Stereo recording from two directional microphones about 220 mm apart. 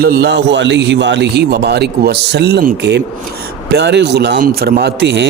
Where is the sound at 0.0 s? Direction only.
45° right (ahead or behind).